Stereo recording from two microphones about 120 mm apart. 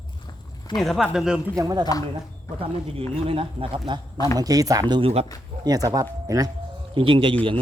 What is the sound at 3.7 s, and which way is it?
Speech, 40° right (ahead or behind).